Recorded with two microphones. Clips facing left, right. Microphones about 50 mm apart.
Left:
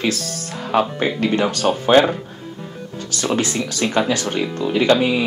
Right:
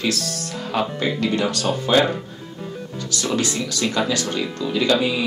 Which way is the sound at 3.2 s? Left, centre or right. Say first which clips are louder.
Left 3 dB; left.